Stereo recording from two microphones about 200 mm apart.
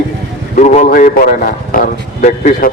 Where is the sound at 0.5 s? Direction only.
35° left (ahead or behind).